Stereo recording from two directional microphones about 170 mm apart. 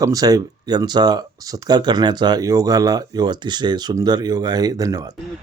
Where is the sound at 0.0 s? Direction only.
20° right (ahead or behind).